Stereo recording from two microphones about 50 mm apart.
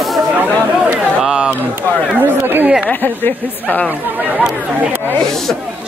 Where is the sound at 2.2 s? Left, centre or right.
Right.